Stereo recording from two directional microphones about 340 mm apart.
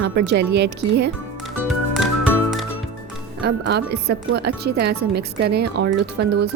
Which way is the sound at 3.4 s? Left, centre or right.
Right.